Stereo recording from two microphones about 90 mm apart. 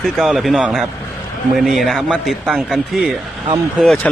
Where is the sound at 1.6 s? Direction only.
Centre (ahead or behind).